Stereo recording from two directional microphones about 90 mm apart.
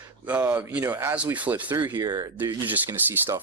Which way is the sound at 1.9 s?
50° right (ahead or behind).